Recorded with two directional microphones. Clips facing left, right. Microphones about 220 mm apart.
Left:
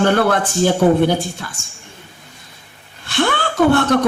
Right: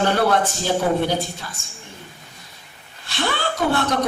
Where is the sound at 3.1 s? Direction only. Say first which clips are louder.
Left 6 dB; 55° left (ahead or behind).